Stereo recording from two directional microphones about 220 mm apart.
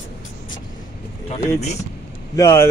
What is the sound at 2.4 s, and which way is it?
Speech, 15° left (ahead or behind).